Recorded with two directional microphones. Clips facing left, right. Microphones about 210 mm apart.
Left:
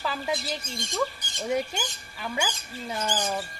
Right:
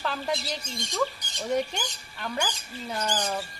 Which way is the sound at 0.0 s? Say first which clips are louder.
Even; 5° left (ahead or behind).